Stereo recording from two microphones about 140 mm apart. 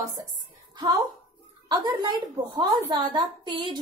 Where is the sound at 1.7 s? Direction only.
30° right (ahead or behind).